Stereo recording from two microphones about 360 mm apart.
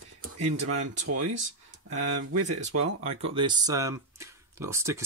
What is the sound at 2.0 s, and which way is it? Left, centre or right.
Speech, right.